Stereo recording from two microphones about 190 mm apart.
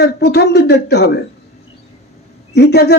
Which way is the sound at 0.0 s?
60° left (ahead or behind).